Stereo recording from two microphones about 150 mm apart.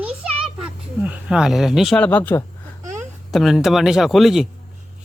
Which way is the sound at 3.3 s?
Centre (ahead or behind).